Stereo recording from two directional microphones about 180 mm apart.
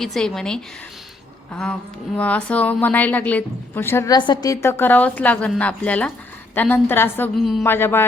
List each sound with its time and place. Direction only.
0.0 s a woman's voice: centre (ahead or behind)
2.1 s a woman's voice: 5° left (ahead or behind)